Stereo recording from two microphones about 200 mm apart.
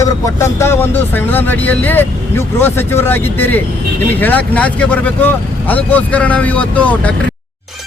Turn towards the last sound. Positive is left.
turn(degrees=5)  # may be behind; listen again after turning